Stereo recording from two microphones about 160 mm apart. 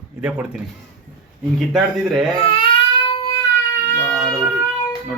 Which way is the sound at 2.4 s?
30° left (ahead or behind).